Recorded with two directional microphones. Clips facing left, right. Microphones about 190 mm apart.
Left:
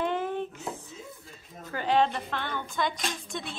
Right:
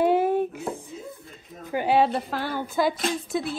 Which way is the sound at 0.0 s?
10° right (ahead or behind).